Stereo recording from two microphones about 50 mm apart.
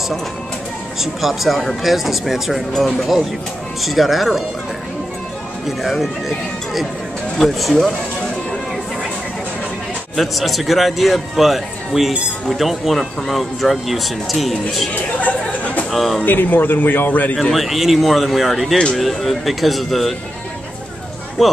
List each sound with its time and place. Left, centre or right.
1.2 s speech: centre
5.7 s speech: centre
10.1 s speech: centre
15.0 s chatter: left
15.9 s speech: centre
16.3 s a man's voice: left
17.4 s speech: centre
21.4 s speech: centre